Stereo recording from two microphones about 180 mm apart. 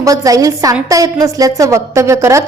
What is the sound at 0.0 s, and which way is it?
A woman's voice, 20° right (ahead or behind).